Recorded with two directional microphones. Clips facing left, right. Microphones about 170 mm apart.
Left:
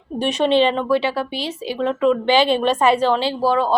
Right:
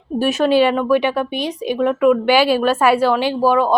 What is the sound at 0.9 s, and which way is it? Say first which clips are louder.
A woman's voice: right 3 dB; 15° right (ahead or behind).